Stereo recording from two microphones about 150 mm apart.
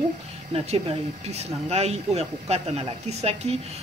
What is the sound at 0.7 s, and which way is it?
Speech, 45° right (ahead or behind).